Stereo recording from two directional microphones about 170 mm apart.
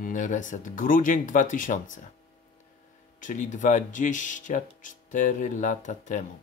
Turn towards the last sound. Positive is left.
turn(degrees=45)  # may be behind; listen again after turning